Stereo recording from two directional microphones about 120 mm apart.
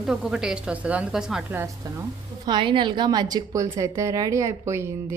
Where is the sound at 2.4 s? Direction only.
40° right (ahead or behind).